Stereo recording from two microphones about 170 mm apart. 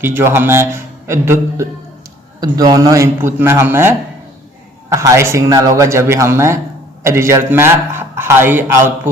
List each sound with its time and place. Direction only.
0.0 s a man's voice: 15° right (ahead or behind)
4.9 s a man's voice: 15° right (ahead or behind)